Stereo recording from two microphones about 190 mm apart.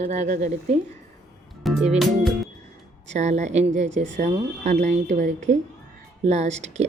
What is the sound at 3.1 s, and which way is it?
Speech, 35° right (ahead or behind).